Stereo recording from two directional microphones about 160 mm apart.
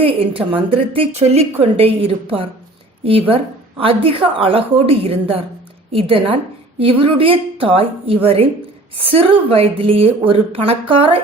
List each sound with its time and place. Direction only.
0.0 s a woman's voice: 35° right (ahead or behind)